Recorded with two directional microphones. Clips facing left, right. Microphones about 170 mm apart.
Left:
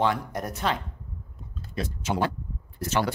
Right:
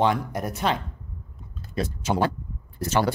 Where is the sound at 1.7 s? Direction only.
35° right (ahead or behind).